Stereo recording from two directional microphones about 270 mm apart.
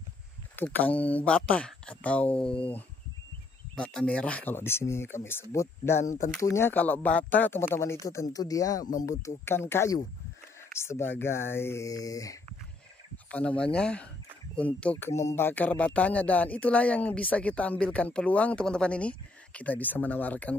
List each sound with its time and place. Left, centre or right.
0.6 s speech: centre
3.7 s speech: centre
5.9 s speech: left
6.4 s speech: centre